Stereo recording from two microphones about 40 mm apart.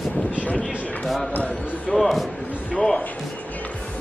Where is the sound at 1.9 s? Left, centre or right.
Centre.